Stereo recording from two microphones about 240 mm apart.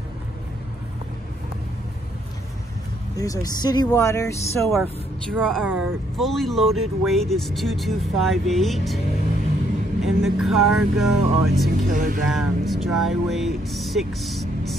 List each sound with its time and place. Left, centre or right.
3.2 s speech: centre
5.3 s speech: centre
10.0 s speech: centre
11.9 s speech: right
12.3 s speech: centre